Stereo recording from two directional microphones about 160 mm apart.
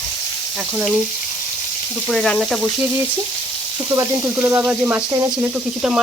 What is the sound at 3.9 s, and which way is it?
Speech, 30° right (ahead or behind).